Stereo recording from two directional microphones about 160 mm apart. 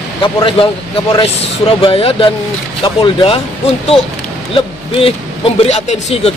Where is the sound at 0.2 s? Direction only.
30° left (ahead or behind).